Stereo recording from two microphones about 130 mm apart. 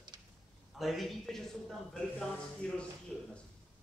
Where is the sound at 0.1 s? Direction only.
35° right (ahead or behind).